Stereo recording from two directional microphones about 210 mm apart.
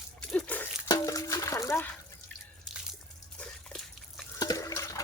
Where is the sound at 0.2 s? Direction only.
5° left (ahead or behind).